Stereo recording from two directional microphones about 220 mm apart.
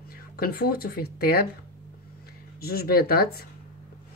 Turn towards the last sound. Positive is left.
turn(degrees=45)  # may be behind; listen again after turning